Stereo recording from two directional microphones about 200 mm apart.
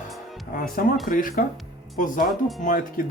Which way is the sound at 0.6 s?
45° left (ahead or behind).